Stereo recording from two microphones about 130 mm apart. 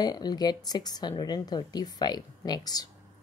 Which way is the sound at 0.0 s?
30° left (ahead or behind).